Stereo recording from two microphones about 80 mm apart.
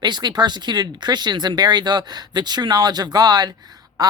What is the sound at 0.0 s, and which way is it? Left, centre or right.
Speech, right.